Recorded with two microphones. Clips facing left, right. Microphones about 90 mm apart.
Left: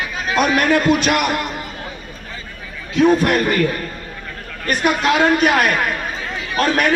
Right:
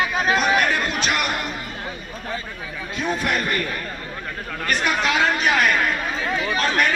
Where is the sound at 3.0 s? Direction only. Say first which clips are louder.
Left 10 dB; 70° left (ahead or behind).